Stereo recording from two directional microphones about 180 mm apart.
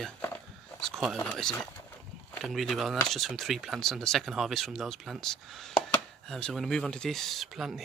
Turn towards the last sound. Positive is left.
turn(degrees=0)  # may be behind; listen again after turning